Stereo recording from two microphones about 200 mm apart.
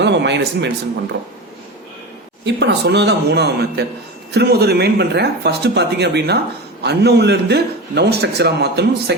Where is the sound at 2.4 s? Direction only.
60° right (ahead or behind).